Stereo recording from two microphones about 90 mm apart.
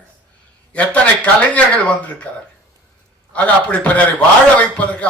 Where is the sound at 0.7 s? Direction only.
15° left (ahead or behind).